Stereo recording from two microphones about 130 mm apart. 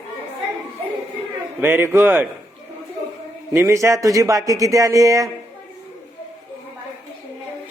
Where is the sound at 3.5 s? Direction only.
20° right (ahead or behind).